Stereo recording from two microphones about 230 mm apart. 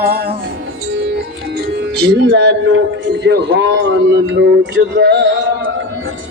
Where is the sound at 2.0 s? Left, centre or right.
Right.